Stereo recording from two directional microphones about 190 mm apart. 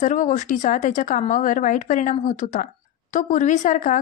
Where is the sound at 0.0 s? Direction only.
40° left (ahead or behind).